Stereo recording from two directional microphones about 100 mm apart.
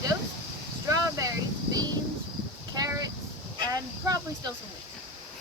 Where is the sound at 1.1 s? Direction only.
35° right (ahead or behind).